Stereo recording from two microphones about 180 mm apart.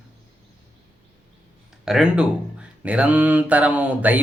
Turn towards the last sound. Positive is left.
turn(degrees=-10)  # may be behind; listen again after turning